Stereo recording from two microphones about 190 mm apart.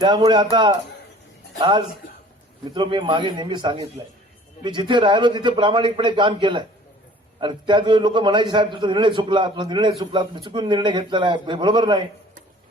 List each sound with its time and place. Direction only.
0.0 s a man's voice: 25° right (ahead or behind)